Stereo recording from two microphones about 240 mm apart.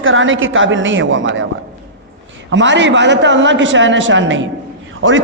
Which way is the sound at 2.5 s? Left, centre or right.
Right.